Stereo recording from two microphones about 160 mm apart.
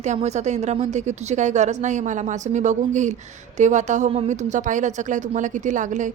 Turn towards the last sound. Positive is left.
turn(degrees=-50)  # may be behind; listen again after turning